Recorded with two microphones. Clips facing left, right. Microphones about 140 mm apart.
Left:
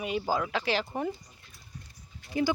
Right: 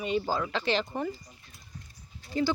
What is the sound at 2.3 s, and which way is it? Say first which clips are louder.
Speech: even; 15° left (ahead or behind).